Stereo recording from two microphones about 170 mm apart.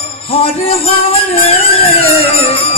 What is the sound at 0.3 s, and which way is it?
Music, 35° left (ahead or behind).